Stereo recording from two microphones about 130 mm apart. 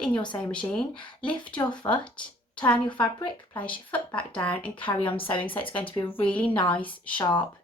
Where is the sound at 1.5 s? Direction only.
35° left (ahead or behind).